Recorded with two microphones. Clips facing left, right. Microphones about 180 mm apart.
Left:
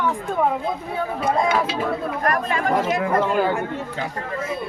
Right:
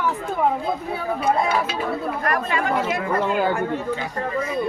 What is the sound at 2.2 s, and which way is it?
Speech, 45° left (ahead or behind).